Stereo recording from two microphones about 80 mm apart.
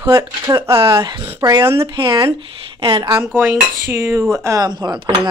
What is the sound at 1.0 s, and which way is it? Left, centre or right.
Speech, right.